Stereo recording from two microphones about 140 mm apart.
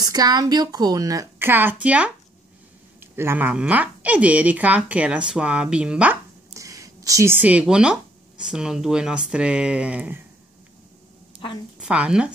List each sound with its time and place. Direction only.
0.0 s a woman's voice: 30° right (ahead or behind); by 6.1 s 10° right (ahead or behind)
6.5 s speech: 25° right (ahead or behind)
11.8 s a woman's voice: 5° right (ahead or behind)